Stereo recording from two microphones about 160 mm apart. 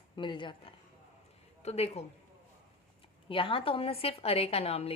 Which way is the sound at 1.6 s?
40° left (ahead or behind).